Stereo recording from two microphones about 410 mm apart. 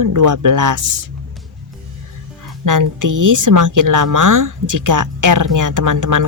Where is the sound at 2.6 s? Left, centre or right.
Right.